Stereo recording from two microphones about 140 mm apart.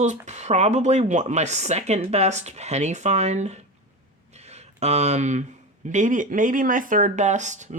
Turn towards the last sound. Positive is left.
turn(degrees=-60)  # may be behind; listen again after turning